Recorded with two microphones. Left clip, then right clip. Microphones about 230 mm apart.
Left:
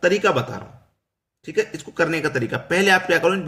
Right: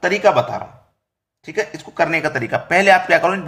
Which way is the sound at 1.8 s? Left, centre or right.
Centre.